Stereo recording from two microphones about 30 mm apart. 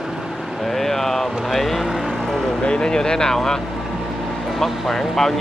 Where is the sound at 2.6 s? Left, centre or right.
Left.